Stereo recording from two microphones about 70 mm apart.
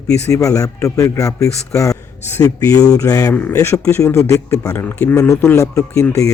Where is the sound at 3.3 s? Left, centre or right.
Left.